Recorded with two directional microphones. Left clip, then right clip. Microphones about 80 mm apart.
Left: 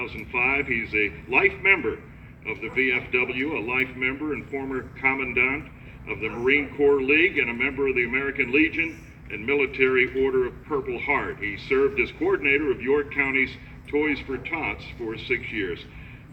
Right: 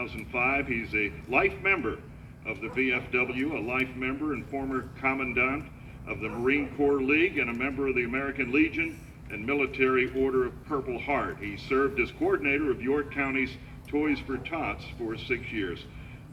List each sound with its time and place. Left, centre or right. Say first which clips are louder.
0.0 s a man's voice: left 4 dB; right